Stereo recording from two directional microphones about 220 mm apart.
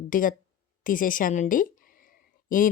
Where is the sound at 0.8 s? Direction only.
40° left (ahead or behind).